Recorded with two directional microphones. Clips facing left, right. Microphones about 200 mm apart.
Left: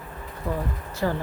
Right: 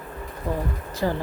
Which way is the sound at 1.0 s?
25° right (ahead or behind).